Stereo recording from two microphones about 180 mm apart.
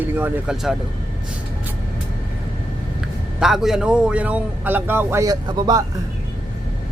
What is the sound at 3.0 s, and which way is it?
A man's voice, 5° right (ahead or behind).